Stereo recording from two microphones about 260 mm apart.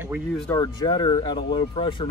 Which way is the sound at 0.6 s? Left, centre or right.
Centre.